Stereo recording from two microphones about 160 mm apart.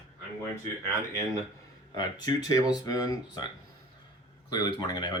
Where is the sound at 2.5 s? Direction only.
20° left (ahead or behind).